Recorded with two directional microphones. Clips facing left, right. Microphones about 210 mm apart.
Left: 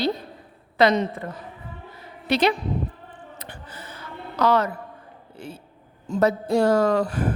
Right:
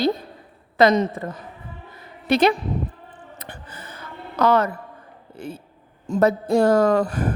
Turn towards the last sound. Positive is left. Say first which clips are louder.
# right 2 dB
turn(degrees=-45)  # may be behind; listen again after turning